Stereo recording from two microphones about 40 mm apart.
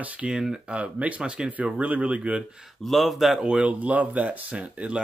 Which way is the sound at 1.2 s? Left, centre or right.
Right.